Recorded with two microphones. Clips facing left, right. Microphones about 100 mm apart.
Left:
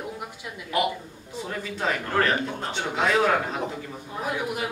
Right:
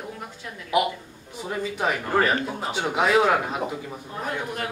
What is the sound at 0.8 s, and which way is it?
A man's voice, 15° right (ahead or behind).